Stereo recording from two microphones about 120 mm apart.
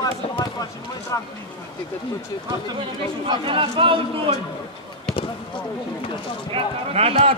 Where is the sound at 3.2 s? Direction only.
45° right (ahead or behind).